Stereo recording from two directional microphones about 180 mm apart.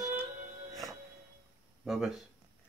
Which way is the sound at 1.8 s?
Centre (ahead or behind).